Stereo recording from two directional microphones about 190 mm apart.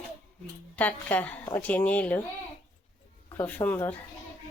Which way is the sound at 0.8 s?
10° left (ahead or behind).